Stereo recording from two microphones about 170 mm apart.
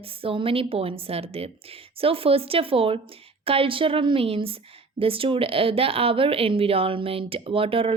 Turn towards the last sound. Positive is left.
turn(degrees=-30)  # may be behind; listen again after turning